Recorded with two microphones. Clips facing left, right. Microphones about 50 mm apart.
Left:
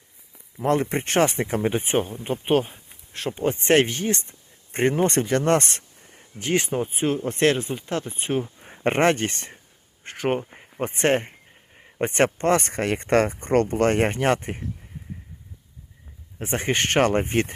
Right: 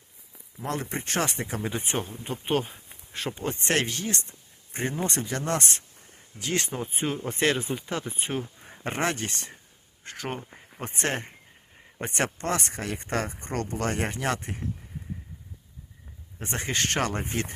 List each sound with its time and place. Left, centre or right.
0.6 s speech: left
2.5 s speech: centre
3.1 s speech: centre
3.3 s speech: centre
3.6 s speech: left
4.7 s speech: left
6.5 s speech: left
6.9 s speech: centre
8.8 s speech: left
16.6 s speech: left